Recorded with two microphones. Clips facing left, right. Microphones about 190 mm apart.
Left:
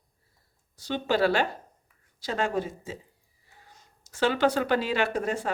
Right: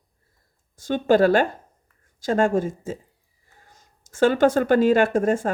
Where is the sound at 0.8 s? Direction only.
50° right (ahead or behind).